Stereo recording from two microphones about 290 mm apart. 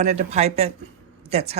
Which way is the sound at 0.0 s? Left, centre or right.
Right.